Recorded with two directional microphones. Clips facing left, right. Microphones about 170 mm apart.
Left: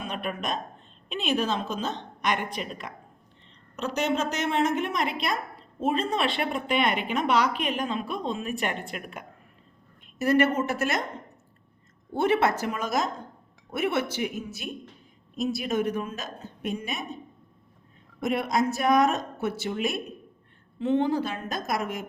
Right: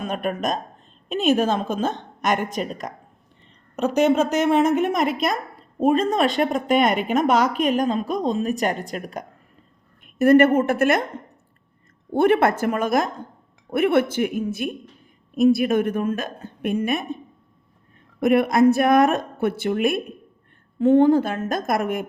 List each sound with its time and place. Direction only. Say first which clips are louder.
0.0 s a woman's voice: right 7 dB; 45° right (ahead or behind)
10.2 s a woman's voice: right 8 dB; 50° right (ahead or behind)
12.1 s a woman's voice: right 6 dB; 55° right (ahead or behind)
18.2 s a woman's voice: right 9 dB; 60° right (ahead or behind)